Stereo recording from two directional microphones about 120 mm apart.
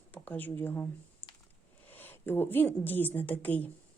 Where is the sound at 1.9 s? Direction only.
15° left (ahead or behind).